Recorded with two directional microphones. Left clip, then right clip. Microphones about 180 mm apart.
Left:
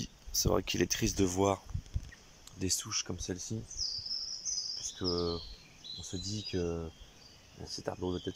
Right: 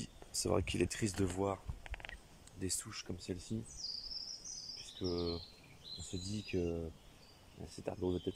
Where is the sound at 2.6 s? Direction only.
Centre (ahead or behind).